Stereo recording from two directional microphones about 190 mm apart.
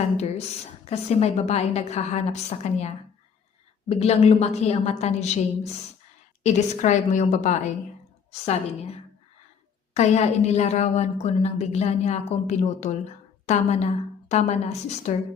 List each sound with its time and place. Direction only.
0.2 s a woman's voice: 35° left (ahead or behind)